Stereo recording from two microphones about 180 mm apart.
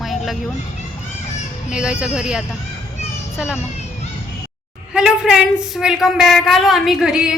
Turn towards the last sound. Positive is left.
turn(degrees=-5)  # may be behind; listen again after turning